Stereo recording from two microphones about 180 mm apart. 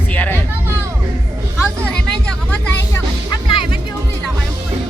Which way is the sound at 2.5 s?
10° left (ahead or behind).